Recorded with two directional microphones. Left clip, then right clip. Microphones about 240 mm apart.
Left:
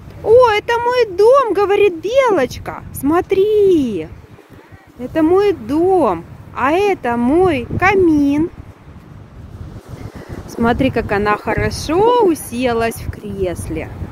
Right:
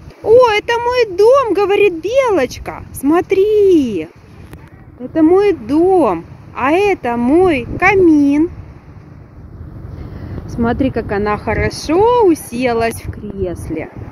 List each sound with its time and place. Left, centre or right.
0.2 s speech: centre
5.1 s speech: centre
10.9 s speech: left
11.2 s speech: centre